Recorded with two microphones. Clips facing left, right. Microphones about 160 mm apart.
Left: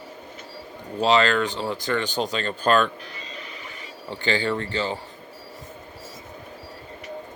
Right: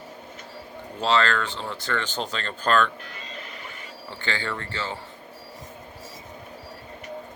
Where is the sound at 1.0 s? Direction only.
15° left (ahead or behind).